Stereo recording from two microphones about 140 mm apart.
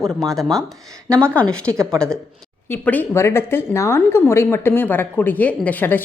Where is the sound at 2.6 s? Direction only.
15° left (ahead or behind).